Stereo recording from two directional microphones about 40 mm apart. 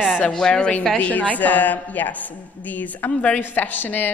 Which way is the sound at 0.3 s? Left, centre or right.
Left.